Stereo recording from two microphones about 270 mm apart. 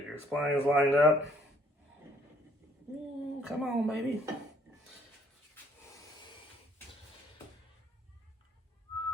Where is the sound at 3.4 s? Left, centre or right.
Centre.